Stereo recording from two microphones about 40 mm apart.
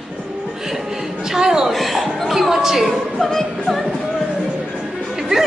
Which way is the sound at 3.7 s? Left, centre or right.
Centre.